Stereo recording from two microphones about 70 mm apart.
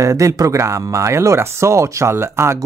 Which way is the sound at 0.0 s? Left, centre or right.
Right.